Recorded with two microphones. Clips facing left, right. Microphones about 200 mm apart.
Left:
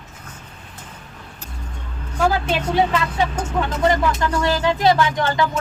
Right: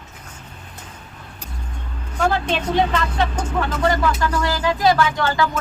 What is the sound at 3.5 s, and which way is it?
Speech, 20° left (ahead or behind).